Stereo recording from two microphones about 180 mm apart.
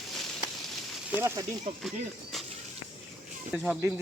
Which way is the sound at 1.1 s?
15° right (ahead or behind).